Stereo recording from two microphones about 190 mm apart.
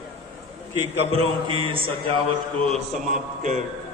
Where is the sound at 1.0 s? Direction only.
30° right (ahead or behind).